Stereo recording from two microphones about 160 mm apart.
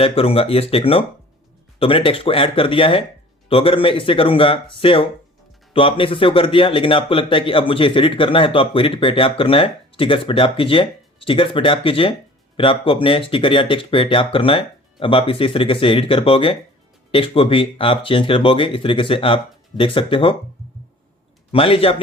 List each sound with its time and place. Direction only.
0.0 s speech: 35° left (ahead or behind)
21.5 s speech: 35° left (ahead or behind)